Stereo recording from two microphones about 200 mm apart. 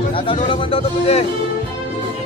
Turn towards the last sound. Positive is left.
turn(degrees=30)  # may be behind; listen again after turning